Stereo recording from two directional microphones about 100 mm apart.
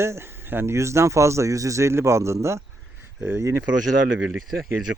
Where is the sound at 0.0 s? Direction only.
25° right (ahead or behind).